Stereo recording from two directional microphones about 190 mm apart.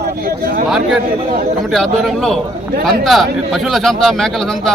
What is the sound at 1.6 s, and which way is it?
A man's voice, centre (ahead or behind).